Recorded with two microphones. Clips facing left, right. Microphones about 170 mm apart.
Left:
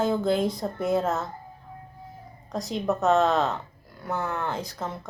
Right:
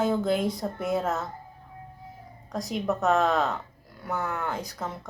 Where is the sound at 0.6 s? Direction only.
25° left (ahead or behind).